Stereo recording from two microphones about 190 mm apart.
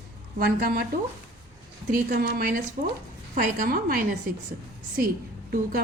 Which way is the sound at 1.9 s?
50° right (ahead or behind).